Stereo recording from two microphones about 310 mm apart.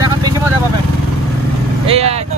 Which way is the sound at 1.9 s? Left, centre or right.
Centre.